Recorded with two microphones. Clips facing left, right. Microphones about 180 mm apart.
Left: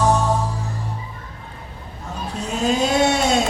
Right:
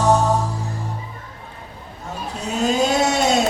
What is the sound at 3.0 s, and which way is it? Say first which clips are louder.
Vehicle: left 1 dB; 40° right (ahead or behind).